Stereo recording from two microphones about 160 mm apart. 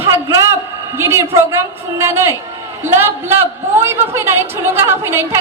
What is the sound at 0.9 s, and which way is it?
A woman's voice, 15° right (ahead or behind).